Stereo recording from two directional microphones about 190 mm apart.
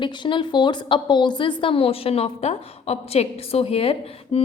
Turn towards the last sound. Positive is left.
turn(degrees=30)  # may be behind; listen again after turning